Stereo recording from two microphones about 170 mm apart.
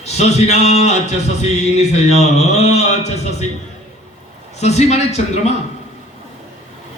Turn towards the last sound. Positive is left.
turn(degrees=40)  # may be behind; listen again after turning